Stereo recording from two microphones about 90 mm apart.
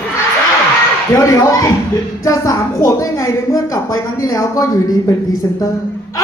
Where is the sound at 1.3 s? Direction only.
35° left (ahead or behind).